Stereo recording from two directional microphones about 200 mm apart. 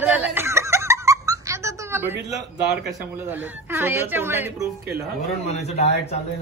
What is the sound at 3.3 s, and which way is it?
Speech, 10° right (ahead or behind).